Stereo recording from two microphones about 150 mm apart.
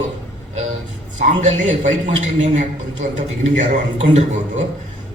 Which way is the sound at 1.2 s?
55° right (ahead or behind).